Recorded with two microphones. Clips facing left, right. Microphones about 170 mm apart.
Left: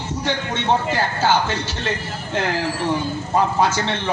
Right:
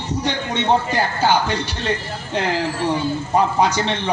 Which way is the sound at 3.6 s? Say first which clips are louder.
Right 1 dB; 15° right (ahead or behind).